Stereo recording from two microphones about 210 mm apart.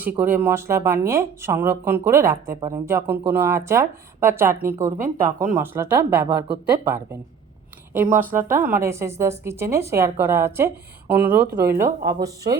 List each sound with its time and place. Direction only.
0.0 s speech: 10° right (ahead or behind)
4.9 s speech: 40° right (ahead or behind)
5.5 s speech: 10° right (ahead or behind)
6.2 s speech: 20° right (ahead or behind)
6.7 s speech: 10° right (ahead or behind)
8.2 s speech: 10° right (ahead or behind)